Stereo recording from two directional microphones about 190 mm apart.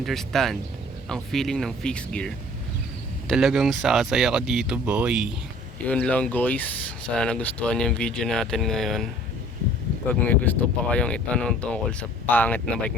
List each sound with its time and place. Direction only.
0.0 s speech: centre (ahead or behind)
5.8 s speech: 5° left (ahead or behind)
10.1 s speech: 10° left (ahead or behind)